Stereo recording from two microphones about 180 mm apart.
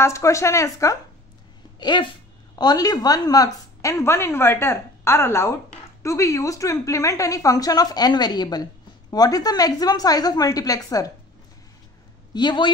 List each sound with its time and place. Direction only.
0.0 s a woman's voice: 15° left (ahead or behind)
12.4 s a woman's voice: 25° left (ahead or behind)